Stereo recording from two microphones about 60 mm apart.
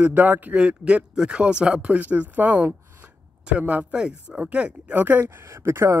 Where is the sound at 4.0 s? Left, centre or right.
Centre.